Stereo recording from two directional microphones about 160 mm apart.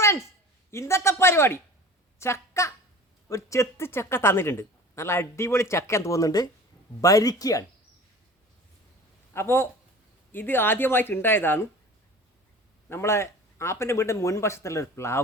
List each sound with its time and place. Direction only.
0.7 s speech: 15° left (ahead or behind)
2.1 s a sound: 15° left (ahead or behind)
3.2 s speech: 20° left (ahead or behind)
9.3 s speech: 15° left (ahead or behind)
12.9 s speech: 15° left (ahead or behind)